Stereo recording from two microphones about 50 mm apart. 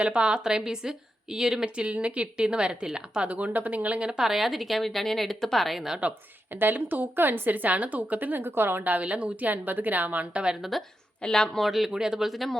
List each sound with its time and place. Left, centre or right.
0.0 s a woman's voice: right
1.7 s speech: right
3.3 s speech: right
4.2 s speech: centre
6.5 s a woman's voice: right
8.8 s a woman's voice: right
10.6 s speech: centre
11.2 s a woman's voice: centre
11.6 s speech: centre